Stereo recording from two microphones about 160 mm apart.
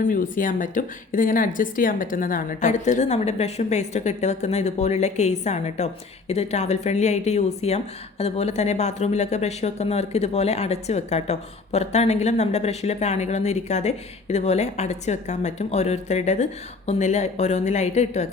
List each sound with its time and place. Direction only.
0.0 s speech: 55° left (ahead or behind)